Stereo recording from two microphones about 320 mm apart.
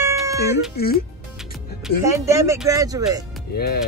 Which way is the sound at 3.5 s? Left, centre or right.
Left.